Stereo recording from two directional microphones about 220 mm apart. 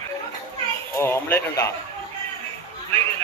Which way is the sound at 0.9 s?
10° left (ahead or behind).